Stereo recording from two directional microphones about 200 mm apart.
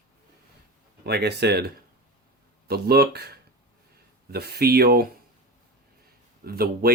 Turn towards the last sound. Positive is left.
turn(degrees=-50)  # may be behind; listen again after turning